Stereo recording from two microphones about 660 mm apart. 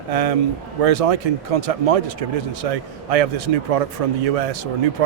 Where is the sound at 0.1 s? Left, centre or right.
Right.